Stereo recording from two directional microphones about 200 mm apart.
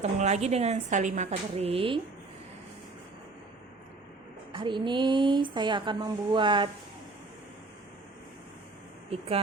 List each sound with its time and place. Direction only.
0.0 s a woman's voice: 35° right (ahead or behind)
4.5 s speech: 25° right (ahead or behind)
9.1 s speech: 30° right (ahead or behind)